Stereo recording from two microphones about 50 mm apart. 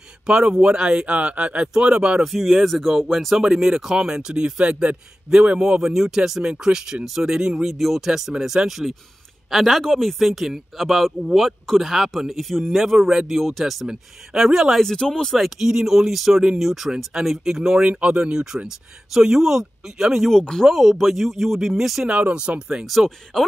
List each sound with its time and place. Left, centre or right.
0.3 s speech: right
2.2 s speech: centre
7.7 s a man's voice: centre
14.8 s speech: centre
15.3 s a man's voice: centre
17.8 s speech: right; by 20.2 s centre
20.2 s speech: centre
20.6 s a man's voice: centre
22.0 s speech: centre
22.8 s a man's voice: centre